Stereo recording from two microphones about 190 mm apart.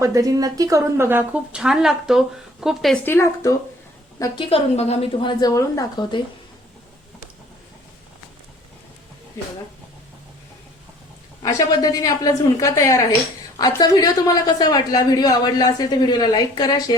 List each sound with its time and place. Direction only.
0.0 s speech: 20° right (ahead or behind); by 3.5 s 15° left (ahead or behind)
4.2 s speech: 25° left (ahead or behind)
9.4 s a woman's voice: 15° left (ahead or behind)
11.4 s a woman's voice: 20° left (ahead or behind)